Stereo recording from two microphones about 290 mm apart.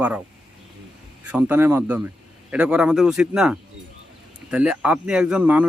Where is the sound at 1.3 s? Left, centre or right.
Centre.